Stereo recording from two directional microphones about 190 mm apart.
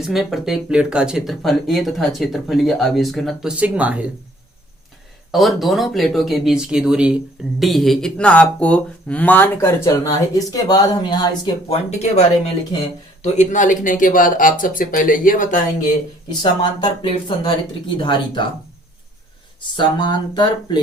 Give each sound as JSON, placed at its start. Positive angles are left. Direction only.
{"t": 0.0, "sound": "speech", "side_deg": 0}
{"t": 5.3, "sound": "speech", "side_deg": 0}
{"t": 11.9, "sound": "speech", "side_deg": 35}
{"t": 16.4, "sound": "speech", "side_deg": 25}
{"t": 19.7, "sound": "speech", "side_deg": 25}